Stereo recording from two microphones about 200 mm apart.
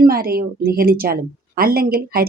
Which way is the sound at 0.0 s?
50° right (ahead or behind).